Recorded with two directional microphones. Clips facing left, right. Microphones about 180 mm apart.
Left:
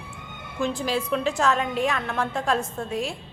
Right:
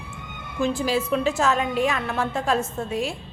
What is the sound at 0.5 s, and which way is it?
A woman's voice, 5° right (ahead or behind).